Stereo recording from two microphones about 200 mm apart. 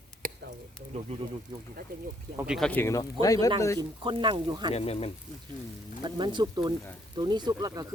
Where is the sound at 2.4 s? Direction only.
5° right (ahead or behind); by 3.5 s 15° left (ahead or behind).